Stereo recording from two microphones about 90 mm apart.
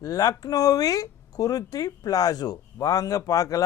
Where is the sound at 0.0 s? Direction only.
45° left (ahead or behind).